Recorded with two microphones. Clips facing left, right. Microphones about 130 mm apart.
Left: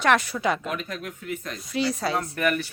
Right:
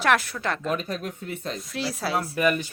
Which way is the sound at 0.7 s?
35° right (ahead or behind).